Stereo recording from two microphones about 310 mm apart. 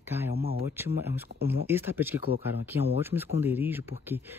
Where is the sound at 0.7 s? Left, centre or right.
Centre.